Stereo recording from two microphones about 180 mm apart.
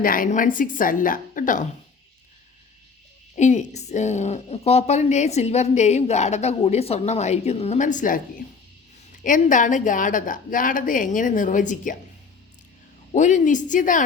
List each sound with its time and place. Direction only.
0.0 s a woman's voice: 50° left (ahead or behind)
3.3 s a woman's voice: 40° left (ahead or behind)
9.2 s a woman's voice: 45° left (ahead or behind)
13.1 s a woman's voice: 45° left (ahead or behind)